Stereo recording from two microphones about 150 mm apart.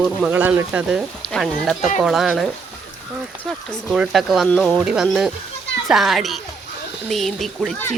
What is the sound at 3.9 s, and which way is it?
Speech, 5° right (ahead or behind).